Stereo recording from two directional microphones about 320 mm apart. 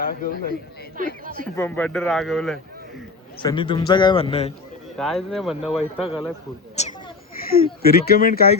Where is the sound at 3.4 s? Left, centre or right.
Centre.